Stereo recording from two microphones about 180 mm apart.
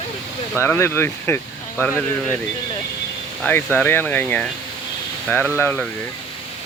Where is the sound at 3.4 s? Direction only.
10° left (ahead or behind).